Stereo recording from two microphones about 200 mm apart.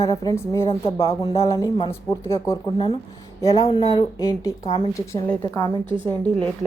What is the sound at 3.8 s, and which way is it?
Speech, 30° left (ahead or behind).